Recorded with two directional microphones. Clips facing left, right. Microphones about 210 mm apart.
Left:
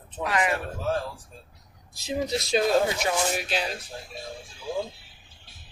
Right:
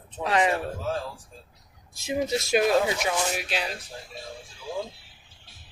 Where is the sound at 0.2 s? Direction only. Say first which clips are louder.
Right 3 dB; 30° right (ahead or behind).